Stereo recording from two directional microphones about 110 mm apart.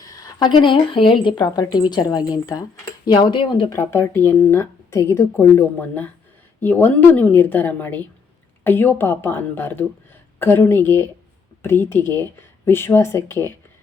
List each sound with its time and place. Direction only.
0.3 s speech: 45° left (ahead or behind)
1.4 s a woman's voice: 40° left (ahead or behind)
3.7 s a woman's voice: 25° left (ahead or behind)